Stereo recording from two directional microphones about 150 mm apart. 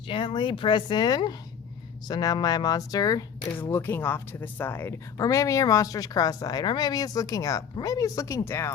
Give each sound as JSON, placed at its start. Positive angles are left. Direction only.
{"t": 0.1, "sound": "a woman's voice", "side_deg": 35}